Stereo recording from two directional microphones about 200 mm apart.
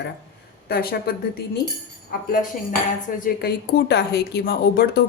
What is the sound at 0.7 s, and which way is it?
Speech, 50° left (ahead or behind).